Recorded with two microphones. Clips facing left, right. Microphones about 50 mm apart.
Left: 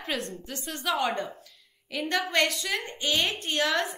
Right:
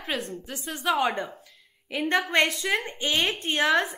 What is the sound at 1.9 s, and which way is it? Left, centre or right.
A woman's voice, right.